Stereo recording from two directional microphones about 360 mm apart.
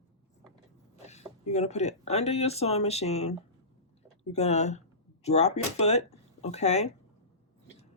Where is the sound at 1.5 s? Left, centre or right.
Centre.